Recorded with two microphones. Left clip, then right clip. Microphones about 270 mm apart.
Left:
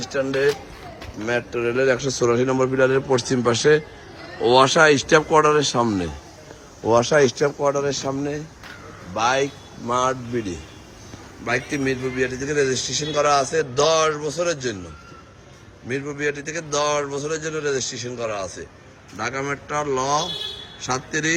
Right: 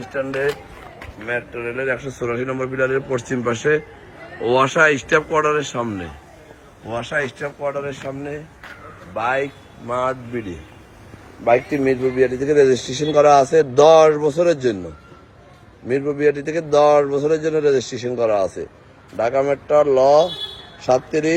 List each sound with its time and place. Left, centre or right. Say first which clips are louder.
0.1 s speech: left 1 dB; centre
11.5 s a man's voice: right 5 dB; centre
15.9 s a man's voice: right 7 dB; centre
19.1 s a man's voice: right 8 dB; centre